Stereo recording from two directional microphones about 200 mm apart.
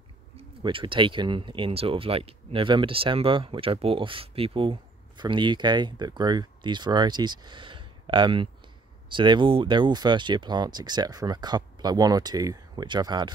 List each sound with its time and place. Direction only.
0.4 s speech: 25° right (ahead or behind)